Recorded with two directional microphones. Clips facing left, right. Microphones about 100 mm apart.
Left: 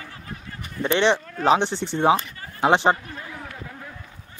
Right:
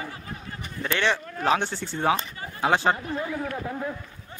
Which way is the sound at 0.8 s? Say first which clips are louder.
Left 6 dB; 20° left (ahead or behind).